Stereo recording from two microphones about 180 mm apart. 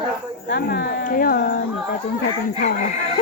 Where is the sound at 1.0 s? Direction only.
50° left (ahead or behind).